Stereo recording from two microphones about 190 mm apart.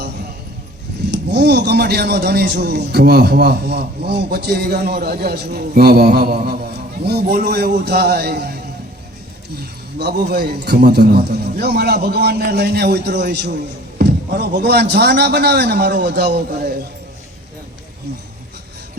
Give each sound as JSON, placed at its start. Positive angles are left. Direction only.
{"t": 1.1, "sound": "a man's voice", "side_deg": -60}
{"t": 10.0, "sound": "a man's voice", "side_deg": -55}